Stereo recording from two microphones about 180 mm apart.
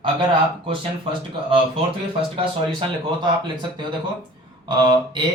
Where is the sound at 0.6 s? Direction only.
30° right (ahead or behind).